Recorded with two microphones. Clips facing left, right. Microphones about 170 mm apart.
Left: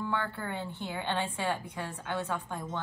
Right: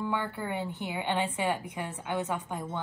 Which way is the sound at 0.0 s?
15° right (ahead or behind).